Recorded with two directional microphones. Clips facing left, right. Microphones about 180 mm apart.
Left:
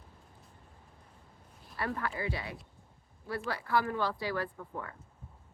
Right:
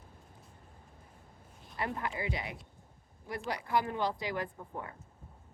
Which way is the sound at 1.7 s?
20° right (ahead or behind).